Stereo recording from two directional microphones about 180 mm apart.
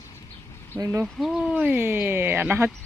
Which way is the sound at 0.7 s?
15° right (ahead or behind).